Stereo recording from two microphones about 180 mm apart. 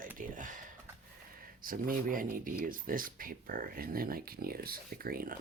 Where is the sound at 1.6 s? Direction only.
50° right (ahead or behind).